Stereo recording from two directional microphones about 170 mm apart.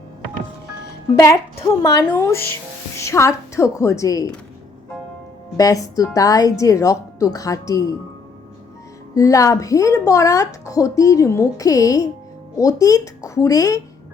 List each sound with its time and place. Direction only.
1.2 s a woman's voice: 20° left (ahead or behind)
5.5 s a woman's voice: 20° left (ahead or behind)
9.1 s a woman's voice: 20° left (ahead or behind)